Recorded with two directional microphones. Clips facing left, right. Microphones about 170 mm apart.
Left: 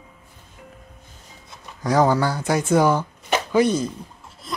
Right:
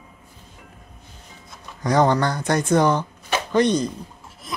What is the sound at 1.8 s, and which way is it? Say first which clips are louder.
Speech: even; 5° left (ahead or behind).